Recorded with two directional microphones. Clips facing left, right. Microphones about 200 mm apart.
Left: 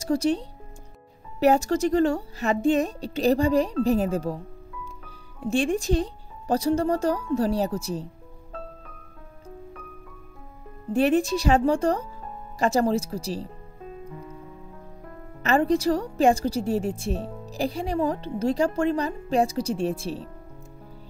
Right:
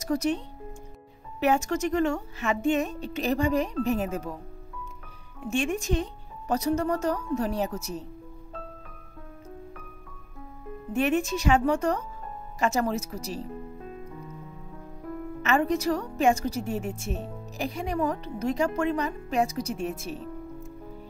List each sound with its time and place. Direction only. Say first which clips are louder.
0.0 s a woman's voice: left 3 dB; 30° left (ahead or behind)
5.5 s a woman's voice: left 4 dB; 35° left (ahead or behind)
10.9 s a woman's voice: left 4 dB; 35° left (ahead or behind)
15.4 s a woman's voice: left 4 dB; 35° left (ahead or behind)